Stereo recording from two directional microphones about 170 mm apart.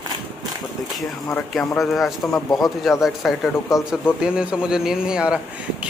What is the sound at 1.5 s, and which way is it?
Speech, centre (ahead or behind).